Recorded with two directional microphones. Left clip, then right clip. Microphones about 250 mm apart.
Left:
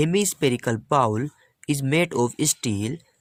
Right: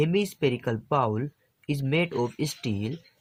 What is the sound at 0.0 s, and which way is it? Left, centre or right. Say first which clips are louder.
Speech: left 3 dB; left.